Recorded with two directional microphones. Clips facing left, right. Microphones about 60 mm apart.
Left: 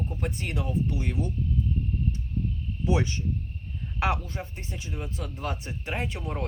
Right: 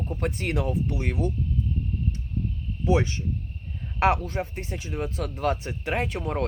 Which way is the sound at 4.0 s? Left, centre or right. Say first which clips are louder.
Right 6 dB; right.